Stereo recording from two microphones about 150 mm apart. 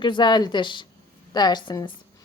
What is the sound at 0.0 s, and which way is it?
A woman's voice, 30° left (ahead or behind).